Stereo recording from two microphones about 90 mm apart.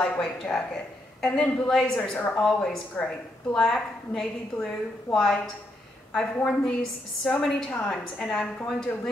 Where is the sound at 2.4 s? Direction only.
5° left (ahead or behind).